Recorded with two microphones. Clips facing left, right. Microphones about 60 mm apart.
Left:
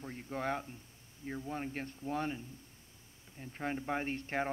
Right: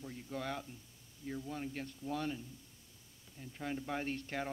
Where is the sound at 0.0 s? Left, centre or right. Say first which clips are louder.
Left 4 dB; left.